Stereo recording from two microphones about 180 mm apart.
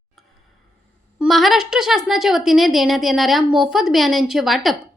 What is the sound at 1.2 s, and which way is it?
A woman's voice, centre (ahead or behind).